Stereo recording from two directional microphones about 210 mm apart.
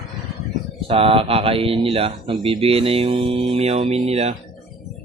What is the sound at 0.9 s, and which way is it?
Speech, 25° right (ahead or behind).